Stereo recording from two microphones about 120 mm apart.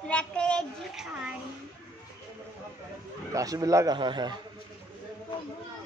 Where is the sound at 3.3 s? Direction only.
30° right (ahead or behind).